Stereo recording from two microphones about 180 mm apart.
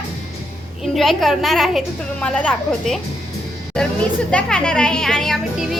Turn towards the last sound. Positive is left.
turn(degrees=0)  # may be behind; listen again after turning